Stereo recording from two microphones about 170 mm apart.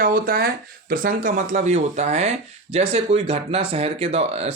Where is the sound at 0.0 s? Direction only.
60° right (ahead or behind).